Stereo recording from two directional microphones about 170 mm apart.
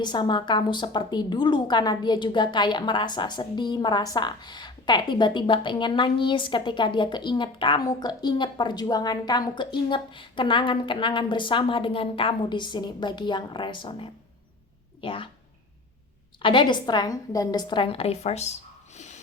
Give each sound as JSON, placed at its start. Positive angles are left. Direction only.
{"t": 0.0, "sound": "a woman's voice", "side_deg": 25}
{"t": 16.4, "sound": "a woman's voice", "side_deg": 30}
{"t": 18.9, "sound": "snort", "side_deg": 40}